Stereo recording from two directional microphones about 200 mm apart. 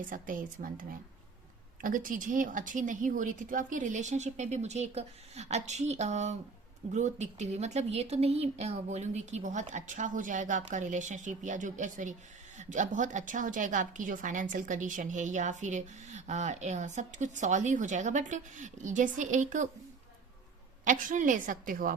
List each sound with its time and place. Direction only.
0.1 s a woman's voice: 45° right (ahead or behind)
20.8 s a woman's voice: 40° right (ahead or behind)